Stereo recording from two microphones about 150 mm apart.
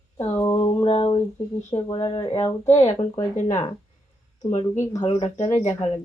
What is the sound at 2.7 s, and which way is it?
Speech, 50° left (ahead or behind).